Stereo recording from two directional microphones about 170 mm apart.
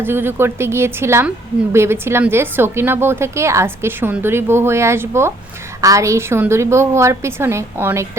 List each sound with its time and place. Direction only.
0.0 s a woman's voice: 15° right (ahead or behind)